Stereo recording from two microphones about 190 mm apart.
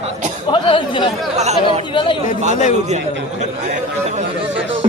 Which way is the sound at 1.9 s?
25° left (ahead or behind).